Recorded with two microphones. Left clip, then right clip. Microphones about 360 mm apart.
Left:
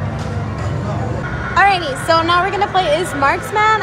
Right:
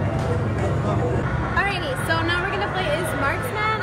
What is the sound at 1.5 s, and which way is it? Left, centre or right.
A woman's voice, centre.